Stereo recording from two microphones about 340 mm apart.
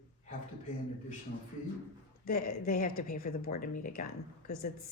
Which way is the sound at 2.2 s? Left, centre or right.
Left.